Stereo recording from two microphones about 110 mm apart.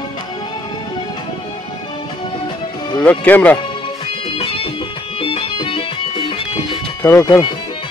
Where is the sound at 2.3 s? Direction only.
50° left (ahead or behind).